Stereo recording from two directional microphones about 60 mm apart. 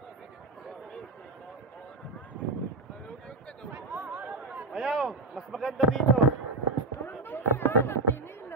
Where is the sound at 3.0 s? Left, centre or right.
Centre.